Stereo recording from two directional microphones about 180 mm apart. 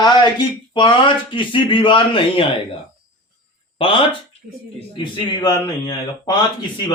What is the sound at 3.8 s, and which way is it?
Speech, 30° left (ahead or behind).